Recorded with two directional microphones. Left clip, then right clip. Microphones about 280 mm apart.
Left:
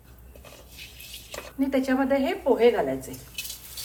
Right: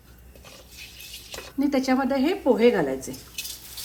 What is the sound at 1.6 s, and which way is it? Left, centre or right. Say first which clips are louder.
A woman's voice: right 2 dB; right.